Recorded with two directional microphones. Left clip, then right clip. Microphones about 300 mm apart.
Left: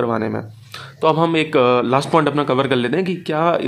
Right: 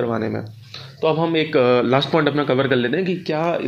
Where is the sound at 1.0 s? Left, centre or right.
Left.